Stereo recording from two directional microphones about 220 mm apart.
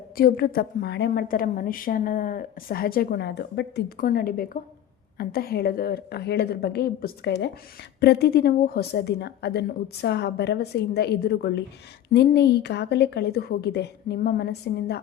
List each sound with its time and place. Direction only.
0.2 s a woman's voice: 40° left (ahead or behind)